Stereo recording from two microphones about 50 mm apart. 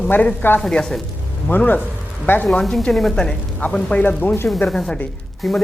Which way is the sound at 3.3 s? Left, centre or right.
Left.